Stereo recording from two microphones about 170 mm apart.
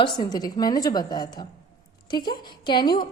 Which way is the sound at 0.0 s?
25° left (ahead or behind).